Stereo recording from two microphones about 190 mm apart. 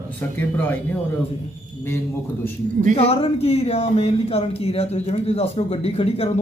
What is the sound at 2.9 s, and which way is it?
Speech, 30° left (ahead or behind).